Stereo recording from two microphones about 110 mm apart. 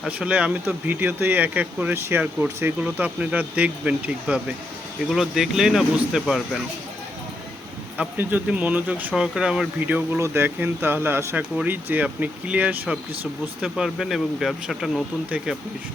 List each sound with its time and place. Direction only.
0.0 s speech: 10° right (ahead or behind)
7.9 s speech: 15° right (ahead or behind)